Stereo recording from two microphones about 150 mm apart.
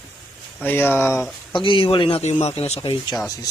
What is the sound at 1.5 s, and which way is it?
Speech, 35° left (ahead or behind).